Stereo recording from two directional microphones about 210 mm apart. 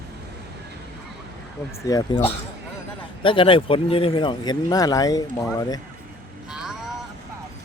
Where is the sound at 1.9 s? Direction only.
15° left (ahead or behind).